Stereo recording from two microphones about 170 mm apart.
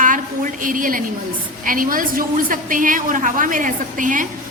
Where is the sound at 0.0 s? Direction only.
50° right (ahead or behind).